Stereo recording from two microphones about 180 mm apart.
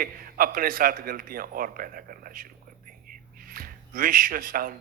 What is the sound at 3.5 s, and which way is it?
Speech, 50° right (ahead or behind).